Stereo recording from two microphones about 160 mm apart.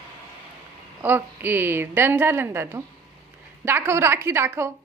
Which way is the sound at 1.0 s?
10° right (ahead or behind).